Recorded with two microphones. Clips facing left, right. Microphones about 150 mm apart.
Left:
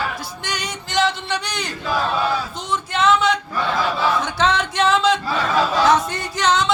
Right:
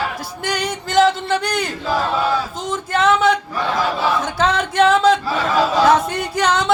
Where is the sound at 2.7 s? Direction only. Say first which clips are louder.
Right 1 dB; 50° right (ahead or behind).